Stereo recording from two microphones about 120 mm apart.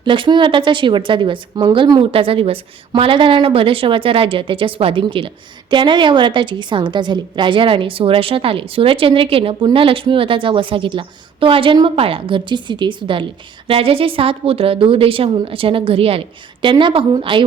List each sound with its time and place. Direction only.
0.0 s a woman's voice: 40° right (ahead or behind)